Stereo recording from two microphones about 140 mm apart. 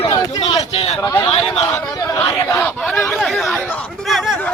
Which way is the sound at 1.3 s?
45° left (ahead or behind).